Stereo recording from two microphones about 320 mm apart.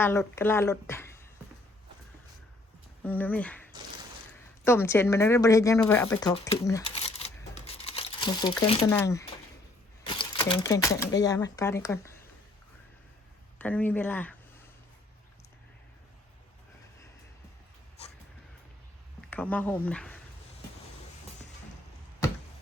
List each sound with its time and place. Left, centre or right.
0.0 s speech: centre
3.0 s speech: centre
13.6 s speech: centre
18.0 s vehicle: centre
19.3 s speech: centre